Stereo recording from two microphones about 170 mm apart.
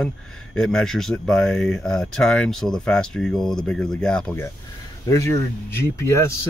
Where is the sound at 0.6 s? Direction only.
5° left (ahead or behind).